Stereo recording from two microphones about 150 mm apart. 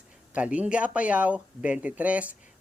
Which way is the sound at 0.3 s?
10° right (ahead or behind).